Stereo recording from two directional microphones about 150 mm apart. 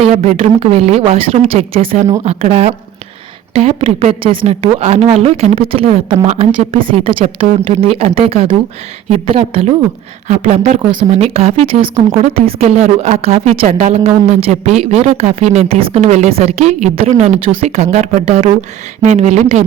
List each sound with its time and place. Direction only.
0.0 s a woman's voice: 45° right (ahead or behind)
6.2 s a woman's voice: 50° right (ahead or behind)